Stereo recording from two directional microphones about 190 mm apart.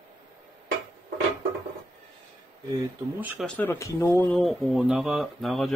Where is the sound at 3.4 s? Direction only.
10° left (ahead or behind).